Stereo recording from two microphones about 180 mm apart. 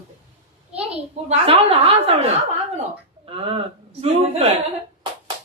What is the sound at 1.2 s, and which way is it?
Speech, 30° right (ahead or behind).